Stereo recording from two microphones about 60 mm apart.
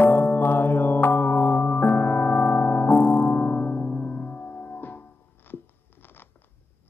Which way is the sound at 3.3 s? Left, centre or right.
Left.